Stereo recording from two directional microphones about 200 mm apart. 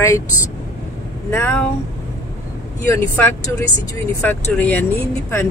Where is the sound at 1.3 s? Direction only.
10° left (ahead or behind).